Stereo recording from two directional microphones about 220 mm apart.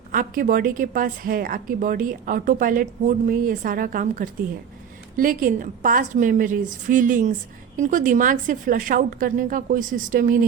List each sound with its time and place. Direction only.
0.1 s a woman's voice: 40° right (ahead or behind)